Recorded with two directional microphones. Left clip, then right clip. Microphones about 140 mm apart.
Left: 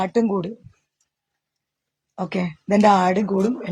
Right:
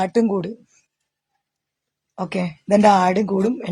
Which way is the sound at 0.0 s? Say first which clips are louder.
Right 2 dB; 20° right (ahead or behind).